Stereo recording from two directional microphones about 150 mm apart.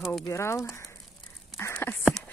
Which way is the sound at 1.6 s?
15° left (ahead or behind).